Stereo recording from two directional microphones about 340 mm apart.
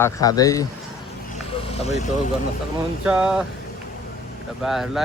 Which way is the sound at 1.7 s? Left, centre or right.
Centre.